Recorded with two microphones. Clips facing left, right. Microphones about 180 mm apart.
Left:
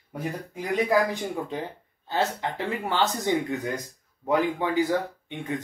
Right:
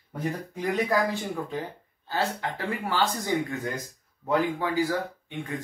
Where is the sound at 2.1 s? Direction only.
20° left (ahead or behind).